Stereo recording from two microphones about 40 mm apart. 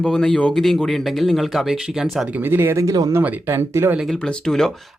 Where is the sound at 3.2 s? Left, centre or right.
Right.